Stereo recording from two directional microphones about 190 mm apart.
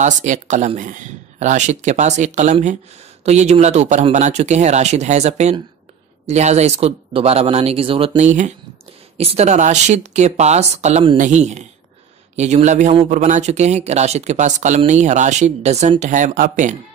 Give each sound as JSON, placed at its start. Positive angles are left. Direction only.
{"t": 0.0, "sound": "speech", "side_deg": -40}